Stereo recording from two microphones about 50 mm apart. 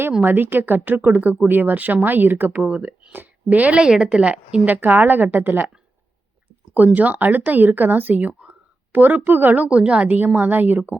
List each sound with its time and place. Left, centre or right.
0.2 s a woman's voice: right
3.8 s a woman's voice: centre; by 5.7 s right
6.7 s a woman's voice: right
8.3 s whispering: centre
8.9 s a woman's voice: right
9.6 s a woman's voice: right